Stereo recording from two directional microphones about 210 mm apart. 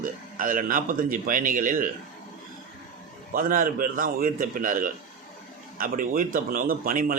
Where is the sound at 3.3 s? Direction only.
40° right (ahead or behind).